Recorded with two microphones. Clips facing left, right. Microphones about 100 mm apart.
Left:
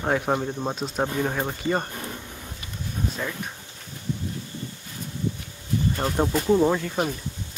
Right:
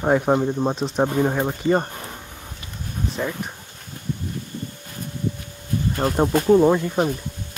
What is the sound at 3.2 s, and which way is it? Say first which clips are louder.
Speech: right 7 dB; 20° right (ahead or behind).